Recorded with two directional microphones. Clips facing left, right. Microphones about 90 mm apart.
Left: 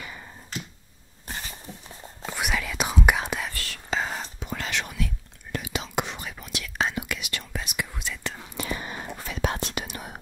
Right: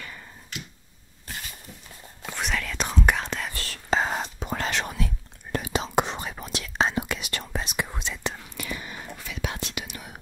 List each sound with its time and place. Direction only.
2.2 s whispering: 5° left (ahead or behind)
3.5 s whispering: 35° right (ahead or behind); by 8.4 s 20° right (ahead or behind)
8.4 s whispering: 30° left (ahead or behind)